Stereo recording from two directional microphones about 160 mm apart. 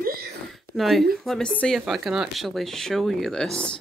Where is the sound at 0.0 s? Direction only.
65° right (ahead or behind).